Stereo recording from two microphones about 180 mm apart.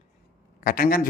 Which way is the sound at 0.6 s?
50° left (ahead or behind).